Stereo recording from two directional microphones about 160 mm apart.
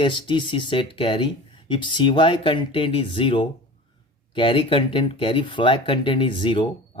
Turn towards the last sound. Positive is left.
turn(degrees=30)  # may be behind; listen again after turning